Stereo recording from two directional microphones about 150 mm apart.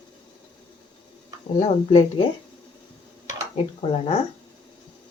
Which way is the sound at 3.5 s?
45° left (ahead or behind).